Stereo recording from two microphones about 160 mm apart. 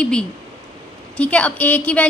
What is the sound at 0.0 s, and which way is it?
A woman's voice, 5° left (ahead or behind).